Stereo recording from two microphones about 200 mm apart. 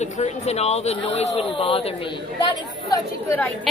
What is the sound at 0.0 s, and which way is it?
Speech, 35° left (ahead or behind).